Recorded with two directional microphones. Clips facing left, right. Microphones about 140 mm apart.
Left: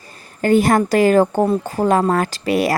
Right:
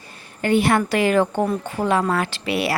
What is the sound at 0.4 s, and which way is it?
Speech, 40° left (ahead or behind).